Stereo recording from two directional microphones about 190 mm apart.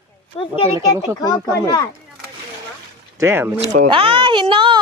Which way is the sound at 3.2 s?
10° right (ahead or behind).